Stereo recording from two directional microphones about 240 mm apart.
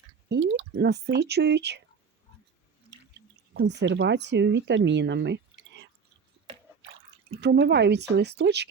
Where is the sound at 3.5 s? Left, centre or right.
Right.